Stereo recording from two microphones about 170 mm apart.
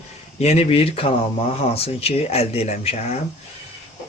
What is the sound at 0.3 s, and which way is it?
Speech, 40° left (ahead or behind).